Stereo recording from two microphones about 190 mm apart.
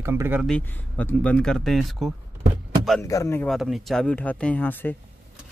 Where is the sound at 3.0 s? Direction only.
15° left (ahead or behind).